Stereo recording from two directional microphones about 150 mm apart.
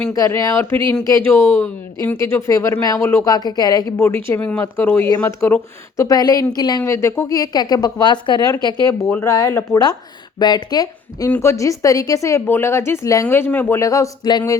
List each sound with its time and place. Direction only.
0.1 s a woman's voice: 25° left (ahead or behind)
3.3 s a woman's voice: 25° left (ahead or behind)
11.3 s a woman's voice: 15° left (ahead or behind)